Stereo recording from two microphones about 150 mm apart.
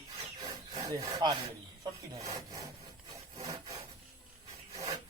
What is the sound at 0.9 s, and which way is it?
Sawing, 25° right (ahead or behind).